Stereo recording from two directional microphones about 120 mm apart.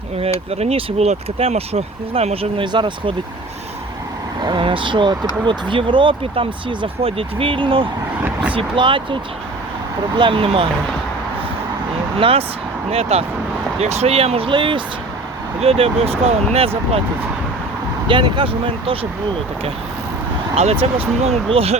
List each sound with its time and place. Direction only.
0.2 s speech: 60° right (ahead or behind); by 3.2 s 45° right (ahead or behind)
4.4 s speech: 45° right (ahead or behind)
8.2 s speech: 10° right (ahead or behind)
8.5 s speech: 45° right (ahead or behind)
10.2 s speech: 45° right (ahead or behind)
12.2 s speech: 55° right (ahead or behind)
18.1 s speech: 45° right (ahead or behind)
20.6 s speech: 55° right (ahead or behind)